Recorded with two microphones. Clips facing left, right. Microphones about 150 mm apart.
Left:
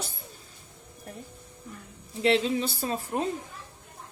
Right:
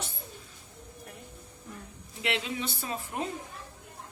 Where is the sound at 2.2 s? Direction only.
35° left (ahead or behind).